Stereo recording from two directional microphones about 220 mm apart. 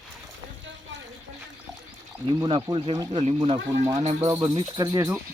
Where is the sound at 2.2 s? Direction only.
20° right (ahead or behind).